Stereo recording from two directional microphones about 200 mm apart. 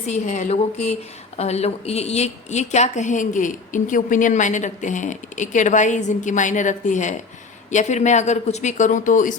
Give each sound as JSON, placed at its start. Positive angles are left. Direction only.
{"t": 0.1, "sound": "a woman's voice", "side_deg": 35}